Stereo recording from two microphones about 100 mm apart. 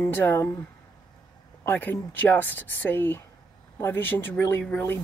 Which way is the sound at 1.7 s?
20° left (ahead or behind).